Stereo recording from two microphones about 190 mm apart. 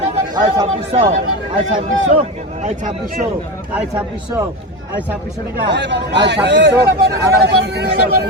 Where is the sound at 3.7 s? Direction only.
15° right (ahead or behind).